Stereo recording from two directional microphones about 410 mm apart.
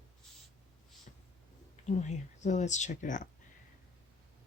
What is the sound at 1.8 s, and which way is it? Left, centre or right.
Speech, centre.